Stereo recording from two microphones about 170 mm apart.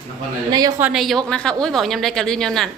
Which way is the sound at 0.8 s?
5° right (ahead or behind).